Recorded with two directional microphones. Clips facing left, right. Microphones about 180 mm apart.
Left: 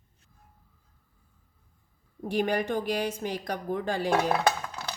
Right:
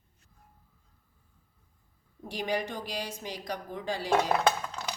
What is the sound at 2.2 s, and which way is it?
Speech, 55° left (ahead or behind).